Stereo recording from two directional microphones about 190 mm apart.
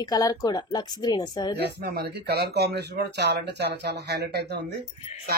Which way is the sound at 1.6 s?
55° right (ahead or behind).